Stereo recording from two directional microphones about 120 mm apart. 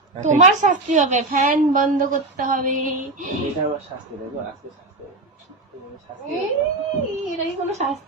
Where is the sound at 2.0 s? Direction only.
90° right.